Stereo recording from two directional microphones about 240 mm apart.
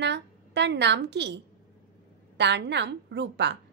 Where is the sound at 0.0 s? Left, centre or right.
Right.